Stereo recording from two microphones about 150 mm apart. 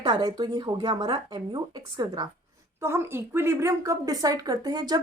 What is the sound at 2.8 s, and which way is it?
A woman's voice, 15° right (ahead or behind).